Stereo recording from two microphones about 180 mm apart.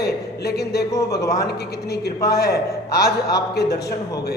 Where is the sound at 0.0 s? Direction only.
65° left (ahead or behind).